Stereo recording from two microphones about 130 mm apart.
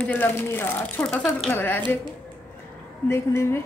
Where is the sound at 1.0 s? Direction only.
5° left (ahead or behind).